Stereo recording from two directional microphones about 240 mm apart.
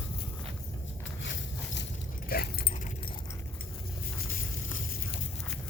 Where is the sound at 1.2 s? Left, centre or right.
Left.